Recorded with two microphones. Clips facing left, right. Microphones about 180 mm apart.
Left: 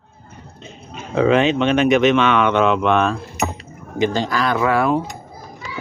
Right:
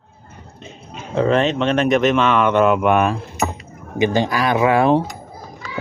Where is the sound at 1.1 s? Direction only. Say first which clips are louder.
Left 2 dB; 5° left (ahead or behind).